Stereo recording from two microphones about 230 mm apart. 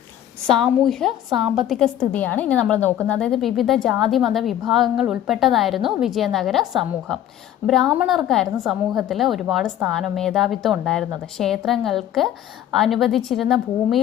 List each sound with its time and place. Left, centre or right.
0.4 s a woman's voice: centre